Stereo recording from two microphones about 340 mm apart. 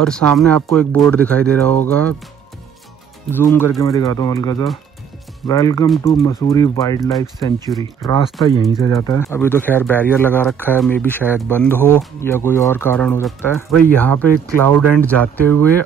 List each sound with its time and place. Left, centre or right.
0.0 s speech: centre
3.3 s speech: centre
8.4 s speech: centre